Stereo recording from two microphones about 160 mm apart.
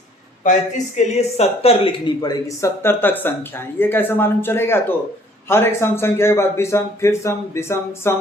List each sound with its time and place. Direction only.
0.9 s speech: 40° left (ahead or behind); by 8.1 s 15° left (ahead or behind)